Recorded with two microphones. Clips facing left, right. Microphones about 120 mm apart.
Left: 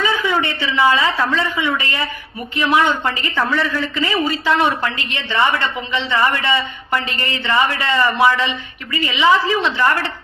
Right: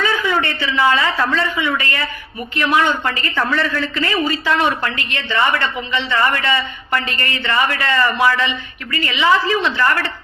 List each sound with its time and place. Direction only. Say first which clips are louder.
0.0 s a man's voice: even; 20° left (ahead or behind)